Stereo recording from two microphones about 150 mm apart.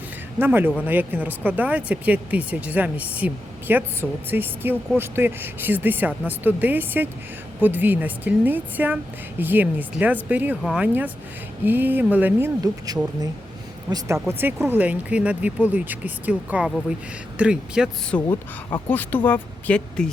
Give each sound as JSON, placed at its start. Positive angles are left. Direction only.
{"t": 0.3, "sound": "speech", "side_deg": -15}
{"t": 11.6, "sound": "speech", "side_deg": -10}
{"t": 12.6, "sound": "speech", "side_deg": -25}
{"t": 18.1, "sound": "speech", "side_deg": 10}